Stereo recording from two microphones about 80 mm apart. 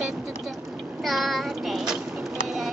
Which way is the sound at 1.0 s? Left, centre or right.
Centre.